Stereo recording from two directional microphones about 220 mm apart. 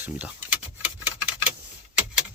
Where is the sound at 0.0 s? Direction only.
5° right (ahead or behind).